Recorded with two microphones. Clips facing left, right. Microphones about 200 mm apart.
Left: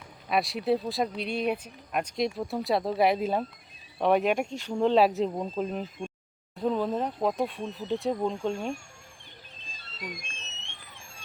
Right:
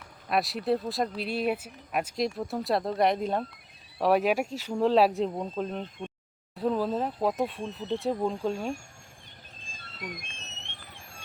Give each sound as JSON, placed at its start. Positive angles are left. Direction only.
{"t": 0.3, "sound": "speech", "side_deg": 0}
{"t": 9.6, "sound": "music", "side_deg": -50}